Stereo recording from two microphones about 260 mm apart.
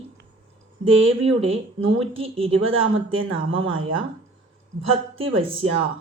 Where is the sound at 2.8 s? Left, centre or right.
Right.